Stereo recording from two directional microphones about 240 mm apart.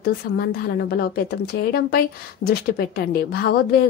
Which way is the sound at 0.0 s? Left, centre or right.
Left.